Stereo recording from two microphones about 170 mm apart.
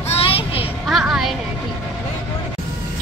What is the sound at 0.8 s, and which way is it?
Speech, centre (ahead or behind).